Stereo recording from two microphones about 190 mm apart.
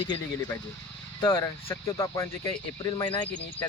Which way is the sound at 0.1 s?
20° left (ahead or behind).